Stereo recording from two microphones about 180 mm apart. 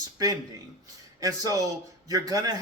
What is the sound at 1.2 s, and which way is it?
A man's voice, 20° right (ahead or behind).